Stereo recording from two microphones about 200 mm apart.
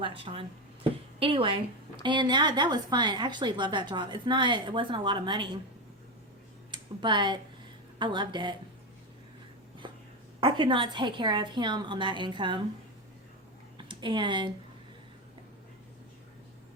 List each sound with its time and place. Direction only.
0.0 s a woman's voice: 25° right (ahead or behind)
6.7 s a woman's voice: 25° right (ahead or behind)
9.8 s a sound: 25° right (ahead or behind)
10.4 s a woman's voice: 25° right (ahead or behind)
13.7 s speech: 25° right (ahead or behind)